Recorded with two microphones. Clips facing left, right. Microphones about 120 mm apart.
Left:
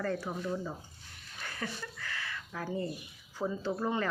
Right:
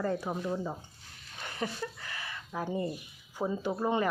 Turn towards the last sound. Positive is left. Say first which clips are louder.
# right 3 dB
turn(degrees=-15)  # may be behind; listen again after turning